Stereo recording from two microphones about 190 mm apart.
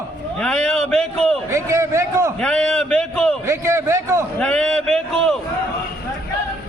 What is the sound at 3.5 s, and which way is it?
Speech, 15° right (ahead or behind).